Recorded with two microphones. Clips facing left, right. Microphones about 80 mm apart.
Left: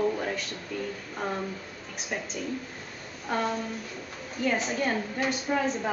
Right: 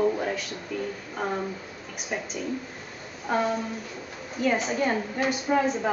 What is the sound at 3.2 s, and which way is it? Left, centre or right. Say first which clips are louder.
A woman's voice: right 3 dB; centre.